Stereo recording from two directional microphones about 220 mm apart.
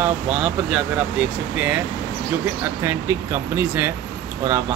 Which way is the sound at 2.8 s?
10° right (ahead or behind).